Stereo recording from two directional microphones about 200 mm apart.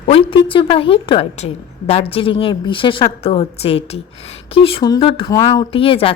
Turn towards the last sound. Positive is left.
turn(degrees=25)  # may be behind; listen again after turning